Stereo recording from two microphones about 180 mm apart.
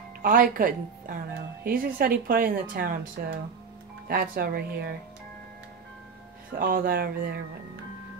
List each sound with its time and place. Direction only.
0.2 s a woman's voice: 50° right (ahead or behind)
6.6 s speech: 55° right (ahead or behind)